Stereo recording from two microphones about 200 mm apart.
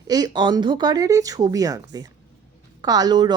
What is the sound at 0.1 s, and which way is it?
A woman's voice, 20° right (ahead or behind).